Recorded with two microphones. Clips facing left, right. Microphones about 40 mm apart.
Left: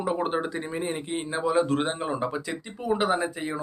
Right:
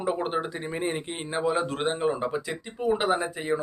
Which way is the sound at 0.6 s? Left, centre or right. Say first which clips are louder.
Right 1 dB; centre.